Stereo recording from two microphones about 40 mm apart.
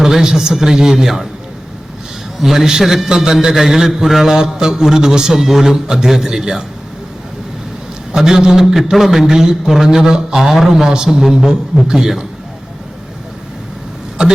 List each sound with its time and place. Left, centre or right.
0.0 s a man's voice: centre
2.4 s a man's voice: centre
3.1 s a man's voice: centre
3.3 s a man's voice: centre
8.1 s a man's voice: centre